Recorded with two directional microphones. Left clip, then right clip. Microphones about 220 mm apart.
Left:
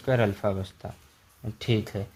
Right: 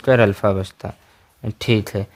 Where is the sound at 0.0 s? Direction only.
45° right (ahead or behind).